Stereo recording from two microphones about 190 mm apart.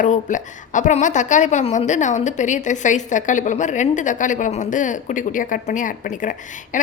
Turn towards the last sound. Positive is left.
turn(degrees=45)  # may be behind; listen again after turning